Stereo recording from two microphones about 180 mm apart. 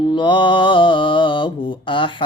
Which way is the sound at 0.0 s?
25° left (ahead or behind).